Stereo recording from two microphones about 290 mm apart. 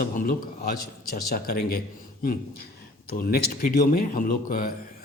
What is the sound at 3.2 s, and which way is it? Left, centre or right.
Speech, left.